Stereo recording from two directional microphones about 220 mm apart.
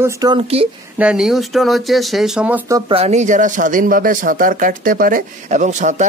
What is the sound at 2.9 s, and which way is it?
Speech, 30° right (ahead or behind).